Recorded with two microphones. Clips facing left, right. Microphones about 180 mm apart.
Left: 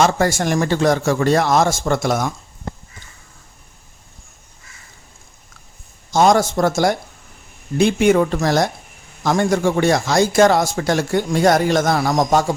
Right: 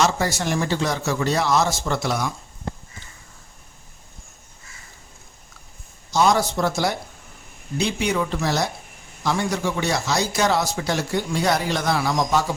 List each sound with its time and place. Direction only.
0.0 s speech: 50° left (ahead or behind)
6.1 s speech: 50° left (ahead or behind)